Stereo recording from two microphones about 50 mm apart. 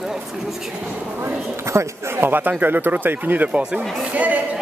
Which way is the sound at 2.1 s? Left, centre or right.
Right.